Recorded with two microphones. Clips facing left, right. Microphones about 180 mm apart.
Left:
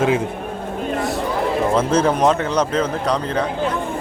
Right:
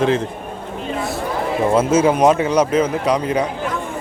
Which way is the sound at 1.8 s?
5° right (ahead or behind).